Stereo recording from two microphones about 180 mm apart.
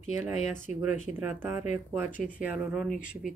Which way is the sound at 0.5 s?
5° right (ahead or behind).